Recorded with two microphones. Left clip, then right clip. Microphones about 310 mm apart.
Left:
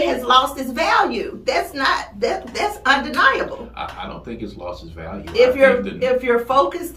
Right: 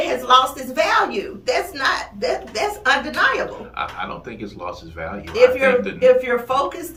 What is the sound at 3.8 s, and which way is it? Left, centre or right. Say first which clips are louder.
Speech: right 7 dB; centre.